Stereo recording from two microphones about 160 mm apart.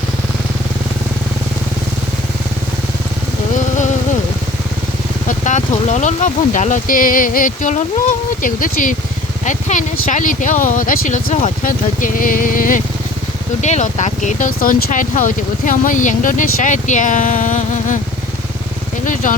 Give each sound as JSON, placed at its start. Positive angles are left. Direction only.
{"t": 5.5, "sound": "speech", "side_deg": 50}
{"t": 13.6, "sound": "speech", "side_deg": 45}
{"t": 19.0, "sound": "speech", "side_deg": 55}